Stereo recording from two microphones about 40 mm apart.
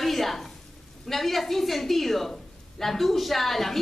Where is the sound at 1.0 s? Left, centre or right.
Centre.